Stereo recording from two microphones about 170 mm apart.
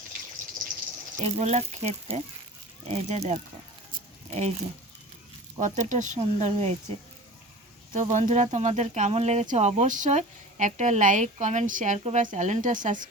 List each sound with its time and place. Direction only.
1.2 s speech: 40° right (ahead or behind)
5.5 s speech: 45° right (ahead or behind)
7.9 s speech: 45° right (ahead or behind)